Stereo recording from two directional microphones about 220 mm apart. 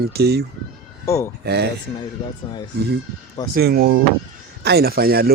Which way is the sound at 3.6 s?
45° right (ahead or behind).